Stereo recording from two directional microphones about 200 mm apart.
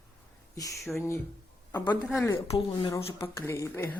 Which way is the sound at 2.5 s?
20° left (ahead or behind).